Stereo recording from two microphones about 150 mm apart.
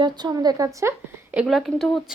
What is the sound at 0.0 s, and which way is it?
A woman's voice, 25° right (ahead or behind).